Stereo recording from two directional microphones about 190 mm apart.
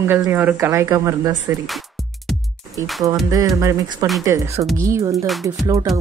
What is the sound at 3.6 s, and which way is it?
Speech, 20° right (ahead or behind).